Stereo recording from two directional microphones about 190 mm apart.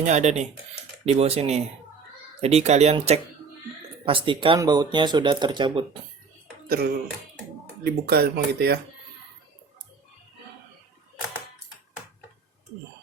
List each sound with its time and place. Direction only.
0.0 s speech: 35° right (ahead or behind)
6.7 s speech: 55° right (ahead or behind)